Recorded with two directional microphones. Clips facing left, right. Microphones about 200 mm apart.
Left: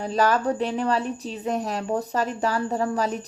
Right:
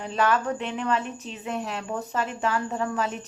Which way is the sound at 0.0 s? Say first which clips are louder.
Left 3 dB; 40° left (ahead or behind).